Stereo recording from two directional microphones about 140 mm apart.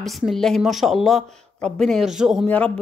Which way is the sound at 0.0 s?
Centre (ahead or behind).